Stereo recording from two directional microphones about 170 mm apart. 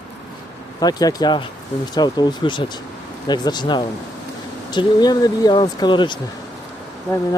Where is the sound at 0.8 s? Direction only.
20° left (ahead or behind).